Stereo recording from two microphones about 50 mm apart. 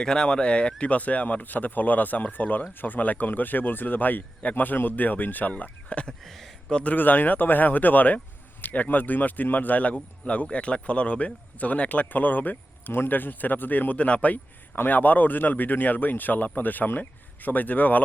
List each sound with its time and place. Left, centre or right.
0.0 s speech: centre
6.2 s speech: centre
6.7 s speech: left
6.9 s speech: left